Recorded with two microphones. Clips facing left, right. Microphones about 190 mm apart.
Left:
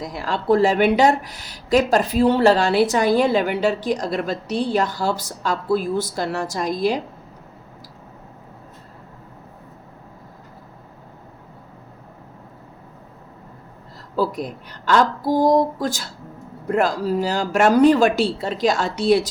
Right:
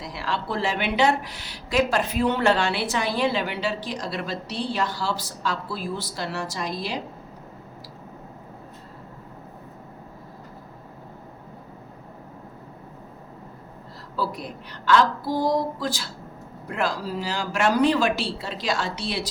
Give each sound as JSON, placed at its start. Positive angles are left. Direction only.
{"t": 0.0, "sound": "a woman's voice", "side_deg": 45}
{"t": 14.8, "sound": "a woman's voice", "side_deg": 45}